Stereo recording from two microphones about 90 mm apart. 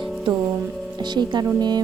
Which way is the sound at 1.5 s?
50° right (ahead or behind).